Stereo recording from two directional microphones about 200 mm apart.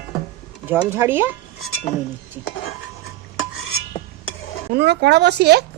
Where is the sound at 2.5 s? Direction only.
55° left (ahead or behind).